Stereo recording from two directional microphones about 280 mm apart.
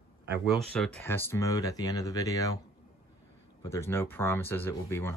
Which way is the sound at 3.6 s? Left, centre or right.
Centre.